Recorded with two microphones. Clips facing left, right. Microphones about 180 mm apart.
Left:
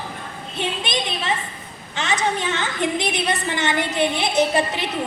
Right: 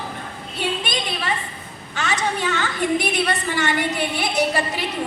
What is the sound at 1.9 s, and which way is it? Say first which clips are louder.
A woman's voice: left 1 dB; 25° left (ahead or behind).